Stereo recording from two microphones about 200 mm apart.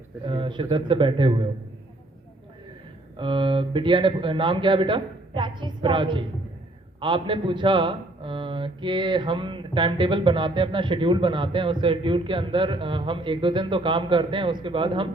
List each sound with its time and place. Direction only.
0.3 s a man's voice: 25° right (ahead or behind)
3.2 s a man's voice: 25° right (ahead or behind)